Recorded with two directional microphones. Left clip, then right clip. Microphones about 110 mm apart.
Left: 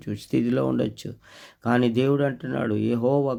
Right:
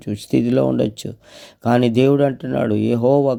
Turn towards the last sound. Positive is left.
turn(degrees=-45)  # may be behind; listen again after turning